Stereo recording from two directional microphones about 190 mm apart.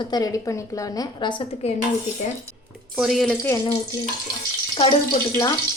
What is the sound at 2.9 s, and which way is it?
Speech, centre (ahead or behind).